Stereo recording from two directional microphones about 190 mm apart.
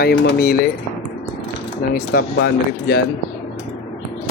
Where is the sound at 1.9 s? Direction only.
50° left (ahead or behind).